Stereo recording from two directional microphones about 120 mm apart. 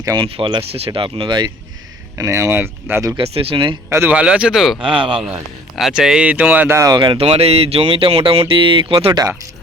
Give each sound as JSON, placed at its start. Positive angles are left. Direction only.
{"t": 0.0, "sound": "speech", "side_deg": -35}
{"t": 0.3, "sound": "speech", "side_deg": -50}
{"t": 2.1, "sound": "speech", "side_deg": -25}
{"t": 3.2, "sound": "speech", "side_deg": -50}
{"t": 3.8, "sound": "speech", "side_deg": -20}
{"t": 4.2, "sound": "speech", "side_deg": -10}
{"t": 4.8, "sound": "speech", "side_deg": -45}
{"t": 5.2, "sound": "speech", "side_deg": -5}
{"t": 6.9, "sound": "speech", "side_deg": -40}
{"t": 7.2, "sound": "speech", "side_deg": -60}